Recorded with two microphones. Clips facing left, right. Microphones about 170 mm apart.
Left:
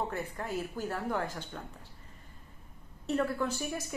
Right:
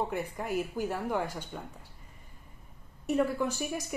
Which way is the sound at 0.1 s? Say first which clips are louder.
Right 3 dB; 15° right (ahead or behind).